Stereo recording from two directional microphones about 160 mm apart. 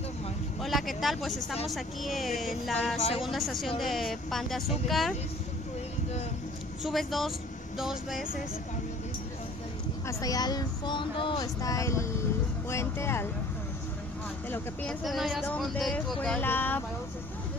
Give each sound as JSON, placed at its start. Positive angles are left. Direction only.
{"t": 0.6, "sound": "a woman's voice", "side_deg": 0}
{"t": 6.8, "sound": "speech", "side_deg": 0}
{"t": 10.0, "sound": "speech", "side_deg": 25}
{"t": 14.5, "sound": "a woman's voice", "side_deg": 10}